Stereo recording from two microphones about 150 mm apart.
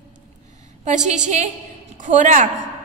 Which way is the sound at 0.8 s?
55° right (ahead or behind).